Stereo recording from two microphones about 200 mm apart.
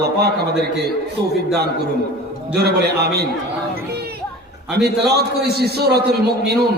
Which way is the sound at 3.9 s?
50° right (ahead or behind).